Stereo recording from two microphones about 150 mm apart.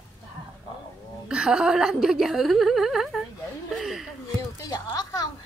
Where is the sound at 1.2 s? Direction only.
5° right (ahead or behind).